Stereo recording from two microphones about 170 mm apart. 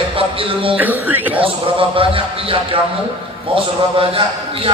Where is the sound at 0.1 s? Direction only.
30° right (ahead or behind).